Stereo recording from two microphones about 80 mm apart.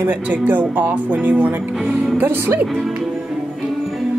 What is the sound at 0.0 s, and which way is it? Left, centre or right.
Speech, right.